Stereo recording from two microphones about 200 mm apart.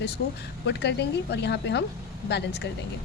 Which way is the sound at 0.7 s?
60° left (ahead or behind).